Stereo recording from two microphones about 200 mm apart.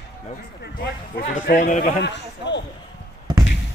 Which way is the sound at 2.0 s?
60° left (ahead or behind).